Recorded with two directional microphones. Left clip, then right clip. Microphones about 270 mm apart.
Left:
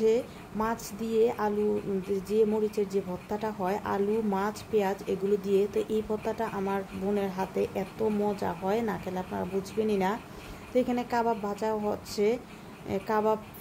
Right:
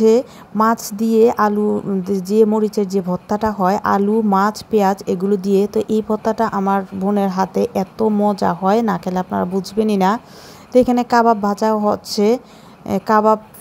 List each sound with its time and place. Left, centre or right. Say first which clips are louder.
0.0 s speech: right 12 dB; right